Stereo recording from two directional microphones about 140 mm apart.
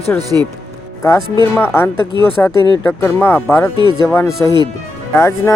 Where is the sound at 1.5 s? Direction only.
15° left (ahead or behind).